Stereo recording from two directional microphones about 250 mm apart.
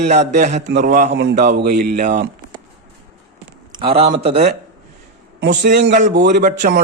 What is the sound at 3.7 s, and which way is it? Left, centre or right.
Speech, right.